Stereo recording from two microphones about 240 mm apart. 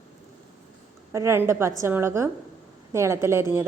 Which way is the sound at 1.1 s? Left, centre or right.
Centre.